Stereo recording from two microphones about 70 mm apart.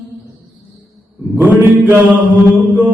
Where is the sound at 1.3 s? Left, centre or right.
Right.